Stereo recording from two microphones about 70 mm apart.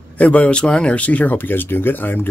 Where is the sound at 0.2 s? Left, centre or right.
Centre.